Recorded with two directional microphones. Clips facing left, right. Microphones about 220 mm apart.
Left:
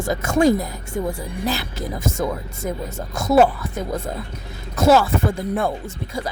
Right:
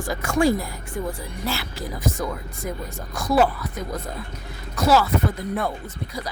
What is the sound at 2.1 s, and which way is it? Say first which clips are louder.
Speech: left 3 dB; 25° left (ahead or behind).